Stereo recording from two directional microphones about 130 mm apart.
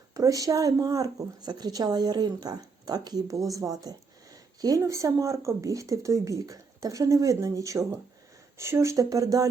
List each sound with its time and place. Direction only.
0.1 s speech: 25° right (ahead or behind)